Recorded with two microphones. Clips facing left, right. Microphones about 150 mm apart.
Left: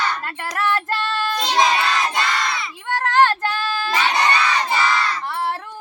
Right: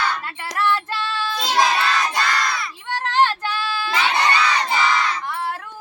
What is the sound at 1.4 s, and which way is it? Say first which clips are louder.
Child singing: even; centre (ahead or behind).